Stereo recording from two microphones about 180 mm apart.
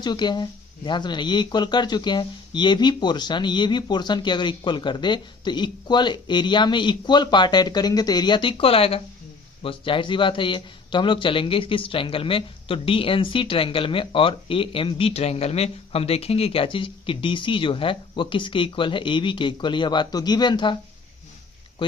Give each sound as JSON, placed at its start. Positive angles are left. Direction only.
{"t": 0.0, "sound": "speech", "side_deg": 25}